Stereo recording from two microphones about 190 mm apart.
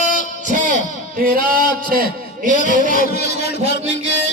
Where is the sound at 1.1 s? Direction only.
50° right (ahead or behind).